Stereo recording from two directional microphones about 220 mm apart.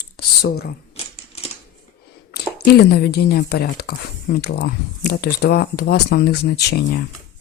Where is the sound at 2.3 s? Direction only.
45° left (ahead or behind).